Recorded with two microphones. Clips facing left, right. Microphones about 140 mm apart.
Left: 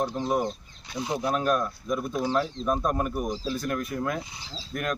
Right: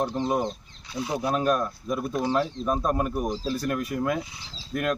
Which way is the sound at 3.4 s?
35° right (ahead or behind).